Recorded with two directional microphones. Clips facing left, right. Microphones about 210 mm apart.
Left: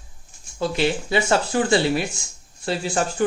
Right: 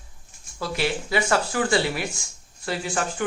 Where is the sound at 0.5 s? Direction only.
25° left (ahead or behind).